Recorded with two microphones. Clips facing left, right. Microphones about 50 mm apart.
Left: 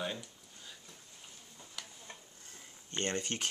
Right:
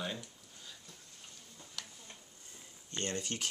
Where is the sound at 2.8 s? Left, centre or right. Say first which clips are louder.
Left 2 dB; left.